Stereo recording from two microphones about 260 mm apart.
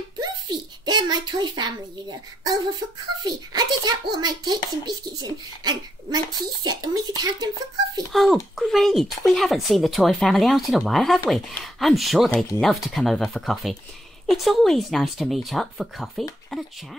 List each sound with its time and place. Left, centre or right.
0.2 s a child's voice: centre
8.1 s speech: centre